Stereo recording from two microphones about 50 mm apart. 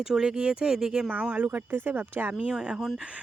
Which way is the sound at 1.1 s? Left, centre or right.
Right.